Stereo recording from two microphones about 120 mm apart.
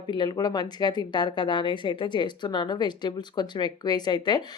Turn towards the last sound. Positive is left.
turn(degrees=35)  # may be behind; listen again after turning